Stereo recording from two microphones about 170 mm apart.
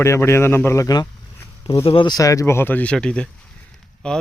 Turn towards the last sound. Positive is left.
turn(degrees=5)  # may be behind; listen again after turning